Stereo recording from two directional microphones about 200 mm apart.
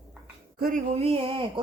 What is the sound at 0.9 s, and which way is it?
Speech, 30° right (ahead or behind).